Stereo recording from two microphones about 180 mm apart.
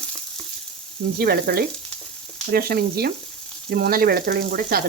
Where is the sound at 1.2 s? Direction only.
60° right (ahead or behind).